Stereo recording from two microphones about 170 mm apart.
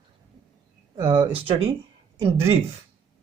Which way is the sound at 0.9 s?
35° right (ahead or behind).